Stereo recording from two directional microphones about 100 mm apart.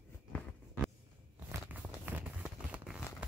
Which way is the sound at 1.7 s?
15° right (ahead or behind).